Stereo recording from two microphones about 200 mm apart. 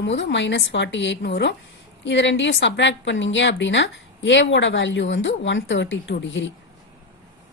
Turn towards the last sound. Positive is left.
turn(degrees=65)  # may be behind; listen again after turning